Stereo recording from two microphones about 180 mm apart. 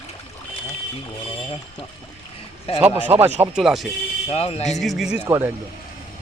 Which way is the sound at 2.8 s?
10° right (ahead or behind).